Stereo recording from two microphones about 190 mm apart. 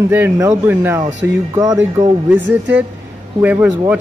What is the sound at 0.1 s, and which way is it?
Speech, 15° right (ahead or behind).